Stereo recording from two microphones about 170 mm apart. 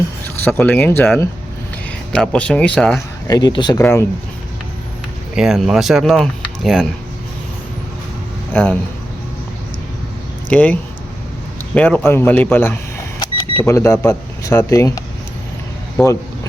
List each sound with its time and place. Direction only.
0.4 s a man's voice: 10° left (ahead or behind)
3.2 s speech: 20° left (ahead or behind)
3.8 s a man's voice: 15° left (ahead or behind)
5.3 s speech: 5° right (ahead or behind)
8.5 s a man's voice: 10° left (ahead or behind)
10.5 s a man's voice: 10° left (ahead or behind)
13.1 s power windows: 20° left (ahead or behind)
13.6 s a man's voice: 15° left (ahead or behind)